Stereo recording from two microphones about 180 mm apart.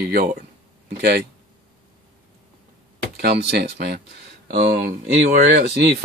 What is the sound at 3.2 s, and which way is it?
A man's voice, 60° right (ahead or behind).